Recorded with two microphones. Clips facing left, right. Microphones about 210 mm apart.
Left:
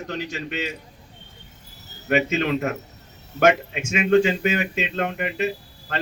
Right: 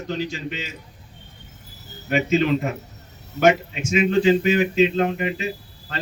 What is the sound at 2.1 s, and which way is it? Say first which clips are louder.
Speech: right 2 dB; 60° left (ahead or behind).